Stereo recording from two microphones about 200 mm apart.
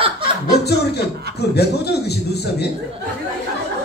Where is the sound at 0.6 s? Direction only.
55° left (ahead or behind).